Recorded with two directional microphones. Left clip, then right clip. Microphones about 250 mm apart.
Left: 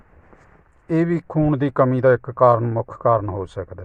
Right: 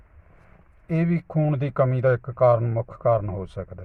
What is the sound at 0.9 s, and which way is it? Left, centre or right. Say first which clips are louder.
Speech: left 7 dB; left.